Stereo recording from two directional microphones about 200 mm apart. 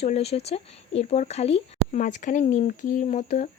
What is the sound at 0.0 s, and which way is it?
Speech, 30° left (ahead or behind).